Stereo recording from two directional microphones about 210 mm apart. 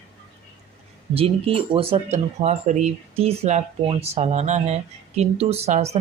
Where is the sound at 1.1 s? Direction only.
25° right (ahead or behind).